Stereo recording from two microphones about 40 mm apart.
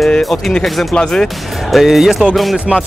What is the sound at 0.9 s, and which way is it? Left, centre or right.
Speech, centre.